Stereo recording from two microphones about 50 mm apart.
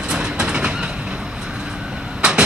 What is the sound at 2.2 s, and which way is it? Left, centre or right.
Train, centre.